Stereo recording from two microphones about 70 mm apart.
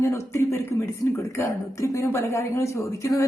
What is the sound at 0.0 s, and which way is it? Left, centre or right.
Speech, left.